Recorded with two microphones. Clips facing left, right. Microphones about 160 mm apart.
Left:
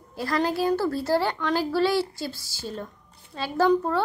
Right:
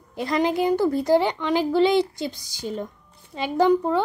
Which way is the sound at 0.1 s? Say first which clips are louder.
Right 3 dB; 20° right (ahead or behind).